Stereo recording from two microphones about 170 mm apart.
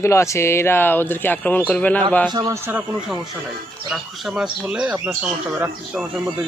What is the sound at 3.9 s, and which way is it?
Speech, centre (ahead or behind).